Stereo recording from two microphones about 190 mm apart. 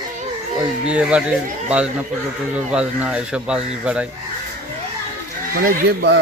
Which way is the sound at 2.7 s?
5° right (ahead or behind).